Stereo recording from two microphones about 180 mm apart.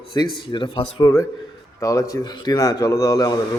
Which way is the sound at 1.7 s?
20° left (ahead or behind).